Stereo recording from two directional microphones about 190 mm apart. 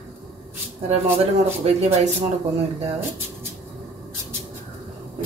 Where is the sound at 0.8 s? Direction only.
30° right (ahead or behind).